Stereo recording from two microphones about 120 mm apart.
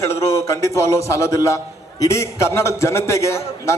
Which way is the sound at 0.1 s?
25° left (ahead or behind).